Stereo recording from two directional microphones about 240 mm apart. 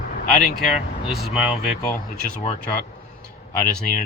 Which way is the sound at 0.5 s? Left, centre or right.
Centre.